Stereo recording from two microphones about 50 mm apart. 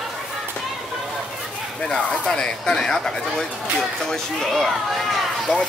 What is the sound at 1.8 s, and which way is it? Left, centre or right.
Speech, centre.